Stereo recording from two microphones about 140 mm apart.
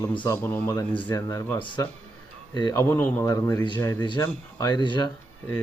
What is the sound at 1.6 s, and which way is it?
A man's voice, 35° left (ahead or behind).